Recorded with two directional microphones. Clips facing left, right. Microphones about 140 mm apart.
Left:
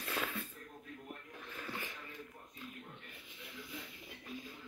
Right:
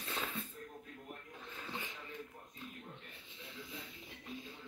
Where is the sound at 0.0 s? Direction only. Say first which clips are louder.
Left 2 dB; 25° right (ahead or behind).